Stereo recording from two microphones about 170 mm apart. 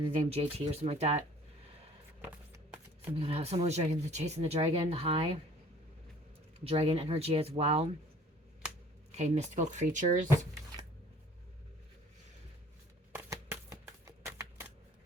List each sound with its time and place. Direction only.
0.2 s speech: 35° right (ahead or behind)
2.5 s music: 15° right (ahead or behind)
3.2 s speech: 35° right (ahead or behind)
6.7 s speech: 35° right (ahead or behind)
9.1 s speech: 40° right (ahead or behind)
13.1 s a sound: 15° right (ahead or behind)